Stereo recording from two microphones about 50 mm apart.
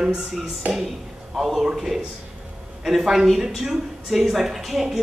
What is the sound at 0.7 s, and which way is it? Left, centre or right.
A woman's voice, centre.